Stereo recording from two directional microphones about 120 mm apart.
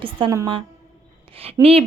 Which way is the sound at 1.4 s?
55° right (ahead or behind).